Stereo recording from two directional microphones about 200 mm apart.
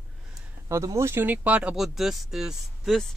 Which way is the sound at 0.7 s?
15° right (ahead or behind).